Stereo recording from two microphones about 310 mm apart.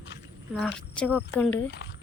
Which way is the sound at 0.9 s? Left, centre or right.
Centre.